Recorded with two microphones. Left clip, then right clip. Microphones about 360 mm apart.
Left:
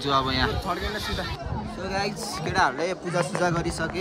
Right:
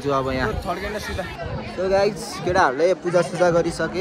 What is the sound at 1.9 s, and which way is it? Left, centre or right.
A man's voice, centre.